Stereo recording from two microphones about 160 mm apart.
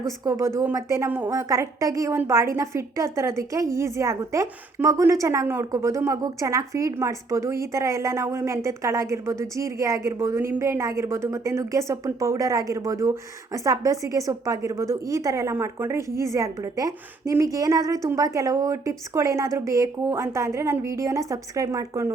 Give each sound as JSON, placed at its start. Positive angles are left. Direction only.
{"t": 0.3, "sound": "a woman's voice", "side_deg": -20}